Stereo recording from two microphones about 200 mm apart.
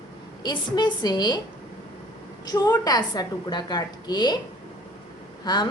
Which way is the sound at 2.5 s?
20° left (ahead or behind).